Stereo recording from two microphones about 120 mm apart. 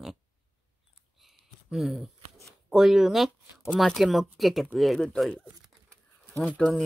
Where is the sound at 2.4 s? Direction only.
Centre (ahead or behind).